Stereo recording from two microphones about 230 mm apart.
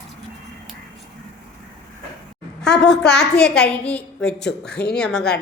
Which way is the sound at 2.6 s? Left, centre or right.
Centre.